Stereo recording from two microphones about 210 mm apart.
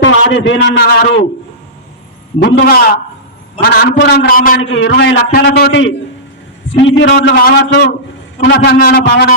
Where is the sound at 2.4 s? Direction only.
50° left (ahead or behind).